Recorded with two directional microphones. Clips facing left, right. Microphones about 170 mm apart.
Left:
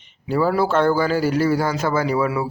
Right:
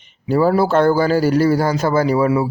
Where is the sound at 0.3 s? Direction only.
35° right (ahead or behind).